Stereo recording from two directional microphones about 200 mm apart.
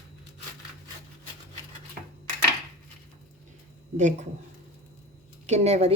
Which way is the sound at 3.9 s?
35° right (ahead or behind).